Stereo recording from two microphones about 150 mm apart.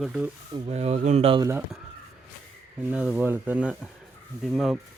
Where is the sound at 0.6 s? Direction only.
45° right (ahead or behind).